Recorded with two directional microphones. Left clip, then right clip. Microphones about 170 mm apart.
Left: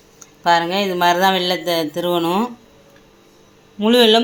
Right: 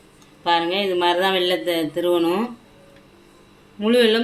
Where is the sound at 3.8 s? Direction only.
35° left (ahead or behind).